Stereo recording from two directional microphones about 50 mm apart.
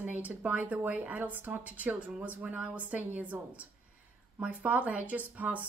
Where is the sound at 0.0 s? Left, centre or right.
Right.